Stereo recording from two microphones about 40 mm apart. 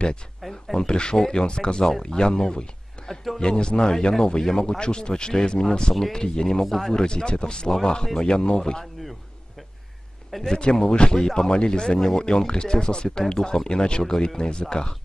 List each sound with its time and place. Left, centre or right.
0.4 s speech: centre
0.7 s speech: left
3.0 s a sound: left
3.3 s speech: left
6.6 s speech: centre
6.9 s speech: centre
10.6 s speech: left